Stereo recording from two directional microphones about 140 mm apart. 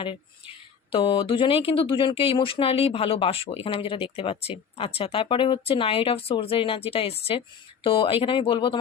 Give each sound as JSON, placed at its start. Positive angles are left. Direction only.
{"t": 0.9, "sound": "speech", "side_deg": 35}